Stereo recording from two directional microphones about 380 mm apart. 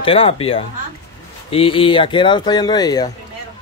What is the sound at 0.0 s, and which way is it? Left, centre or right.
Speech, centre.